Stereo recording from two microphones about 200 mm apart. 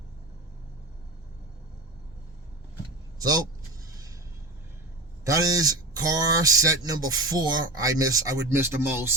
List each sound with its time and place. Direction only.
3.2 s speech: 20° right (ahead or behind)
5.2 s speech: 15° right (ahead or behind)